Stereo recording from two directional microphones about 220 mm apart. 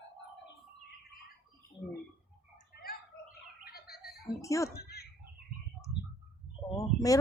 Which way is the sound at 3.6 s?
45° left (ahead or behind).